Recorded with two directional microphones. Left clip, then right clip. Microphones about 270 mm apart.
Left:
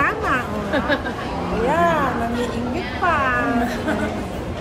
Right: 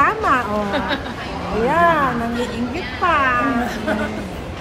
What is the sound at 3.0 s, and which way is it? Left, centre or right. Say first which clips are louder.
Cat: right 3 dB; right.